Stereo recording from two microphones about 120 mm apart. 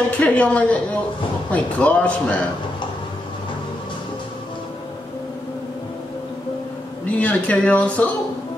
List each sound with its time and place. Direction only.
0.1 s speech: 10° left (ahead or behind)
7.1 s speech: 10° left (ahead or behind)